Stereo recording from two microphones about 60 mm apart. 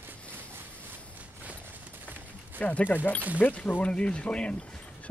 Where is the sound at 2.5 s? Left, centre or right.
Left.